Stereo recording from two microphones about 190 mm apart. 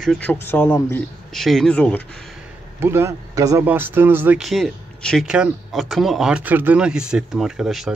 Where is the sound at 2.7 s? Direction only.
15° right (ahead or behind).